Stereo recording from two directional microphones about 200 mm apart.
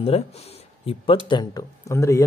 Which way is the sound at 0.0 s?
30° left (ahead or behind).